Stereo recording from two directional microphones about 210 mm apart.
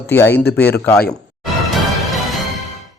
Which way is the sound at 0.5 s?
10° left (ahead or behind).